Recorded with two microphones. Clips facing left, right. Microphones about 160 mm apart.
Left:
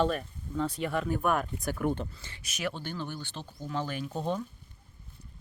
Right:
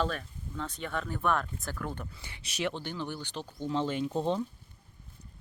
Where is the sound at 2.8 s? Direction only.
15° right (ahead or behind).